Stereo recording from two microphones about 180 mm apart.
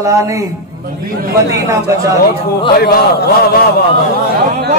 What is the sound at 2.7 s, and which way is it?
Speech, 60° left (ahead or behind).